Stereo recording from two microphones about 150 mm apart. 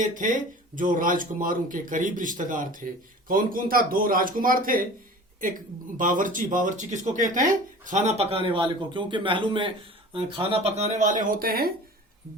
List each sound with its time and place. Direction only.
0.0 s speech: 60° right (ahead or behind)
6.0 s a man's voice: 60° right (ahead or behind); by 11.7 s 80° right